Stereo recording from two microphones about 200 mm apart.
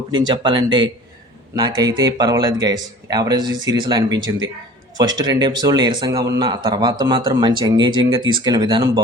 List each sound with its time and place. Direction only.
0.1 s a man's voice: 20° right (ahead or behind)